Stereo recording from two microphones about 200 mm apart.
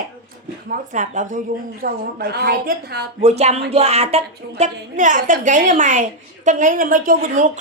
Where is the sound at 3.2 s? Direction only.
35° right (ahead or behind).